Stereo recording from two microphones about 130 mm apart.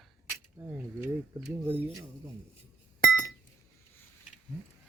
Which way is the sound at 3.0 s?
25° left (ahead or behind).